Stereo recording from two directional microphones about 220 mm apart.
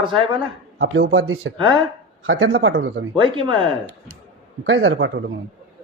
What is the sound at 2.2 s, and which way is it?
Speech, 65° right (ahead or behind).